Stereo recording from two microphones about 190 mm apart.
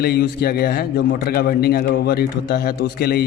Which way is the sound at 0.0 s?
55° left (ahead or behind).